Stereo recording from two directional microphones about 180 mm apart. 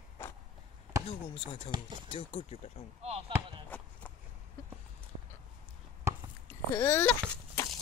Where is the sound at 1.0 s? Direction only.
30° left (ahead or behind).